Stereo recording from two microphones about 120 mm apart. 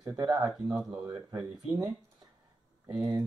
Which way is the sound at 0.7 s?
10° right (ahead or behind).